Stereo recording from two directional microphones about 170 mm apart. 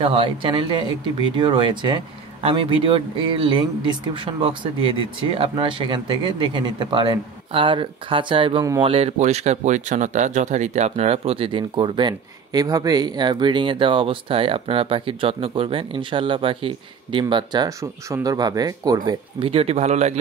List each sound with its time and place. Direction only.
0.0 s speech: 30° right (ahead or behind)
19.4 s speech: 35° right (ahead or behind)